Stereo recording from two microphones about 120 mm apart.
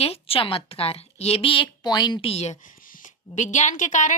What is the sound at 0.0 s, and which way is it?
A woman's voice, 55° left (ahead or behind).